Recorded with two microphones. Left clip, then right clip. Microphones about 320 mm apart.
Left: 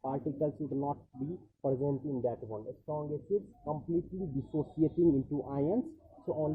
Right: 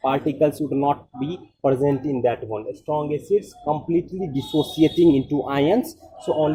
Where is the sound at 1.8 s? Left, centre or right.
Right.